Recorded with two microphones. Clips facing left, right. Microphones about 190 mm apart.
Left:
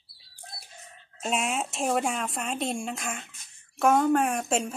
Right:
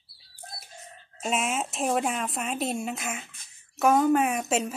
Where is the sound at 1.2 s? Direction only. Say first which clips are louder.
Right 1 dB; centre (ahead or behind).